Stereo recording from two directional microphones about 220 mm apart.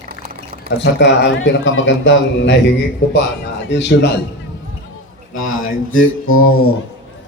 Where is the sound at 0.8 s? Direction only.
55° left (ahead or behind).